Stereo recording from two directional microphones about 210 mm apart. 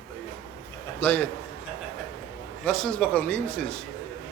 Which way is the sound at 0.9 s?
10° left (ahead or behind).